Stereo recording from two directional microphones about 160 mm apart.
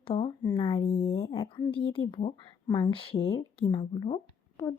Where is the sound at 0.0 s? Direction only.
35° left (ahead or behind).